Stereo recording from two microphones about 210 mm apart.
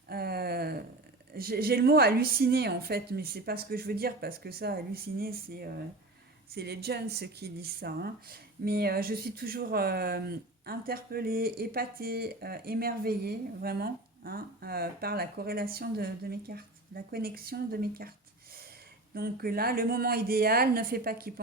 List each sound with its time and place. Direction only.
0.1 s a sound: 45° right (ahead or behind)
1.3 s speech: 45° right (ahead or behind)
19.1 s speech: 45° right (ahead or behind)